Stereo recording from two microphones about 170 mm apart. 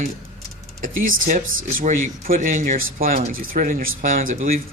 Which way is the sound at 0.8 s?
55° right (ahead or behind).